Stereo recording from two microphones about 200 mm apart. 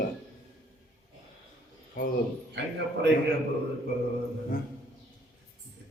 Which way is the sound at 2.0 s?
50° left (ahead or behind).